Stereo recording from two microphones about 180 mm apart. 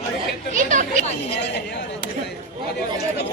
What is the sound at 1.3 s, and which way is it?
Speech, 70° left (ahead or behind).